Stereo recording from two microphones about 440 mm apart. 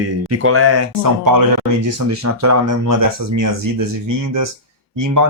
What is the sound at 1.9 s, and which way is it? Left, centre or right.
Speech, right.